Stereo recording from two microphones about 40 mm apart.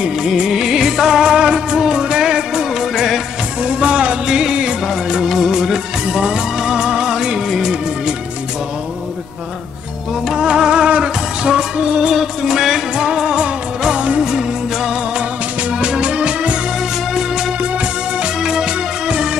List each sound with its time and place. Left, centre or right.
0.4 s music: centre
3.6 s music: right
4.3 s music: centre
4.8 s music: centre
10.3 s music: centre
12.1 s music: centre; by 14.3 s right
14.3 s music: centre
17.6 s music: right
18.4 s music: centre